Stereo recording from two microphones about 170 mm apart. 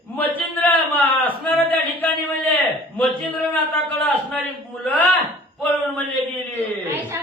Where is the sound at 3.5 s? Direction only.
10° left (ahead or behind).